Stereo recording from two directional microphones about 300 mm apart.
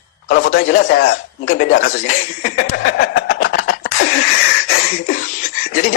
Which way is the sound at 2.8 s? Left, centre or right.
Left.